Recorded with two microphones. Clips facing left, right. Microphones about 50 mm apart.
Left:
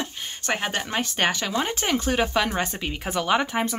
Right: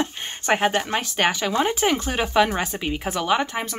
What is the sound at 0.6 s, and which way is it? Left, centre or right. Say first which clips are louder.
Speech: right 5 dB; centre.